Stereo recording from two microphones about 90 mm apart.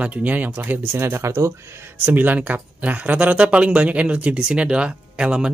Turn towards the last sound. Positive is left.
turn(degrees=-10)  # may be behind; listen again after turning